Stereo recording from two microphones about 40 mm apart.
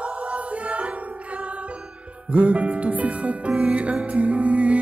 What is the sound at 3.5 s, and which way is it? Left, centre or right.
Music, centre.